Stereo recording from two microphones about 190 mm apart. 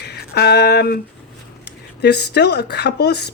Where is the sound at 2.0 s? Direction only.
60° left (ahead or behind).